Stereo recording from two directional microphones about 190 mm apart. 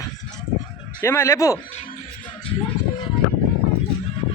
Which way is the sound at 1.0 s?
15° left (ahead or behind).